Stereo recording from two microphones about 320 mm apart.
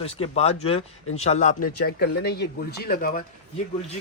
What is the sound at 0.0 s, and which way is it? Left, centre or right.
Speech, centre.